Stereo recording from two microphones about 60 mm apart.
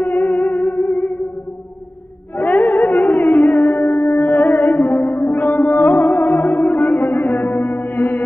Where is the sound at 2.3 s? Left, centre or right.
Left.